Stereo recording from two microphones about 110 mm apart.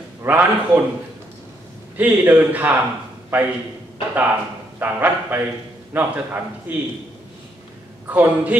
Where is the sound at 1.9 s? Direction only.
15° right (ahead or behind).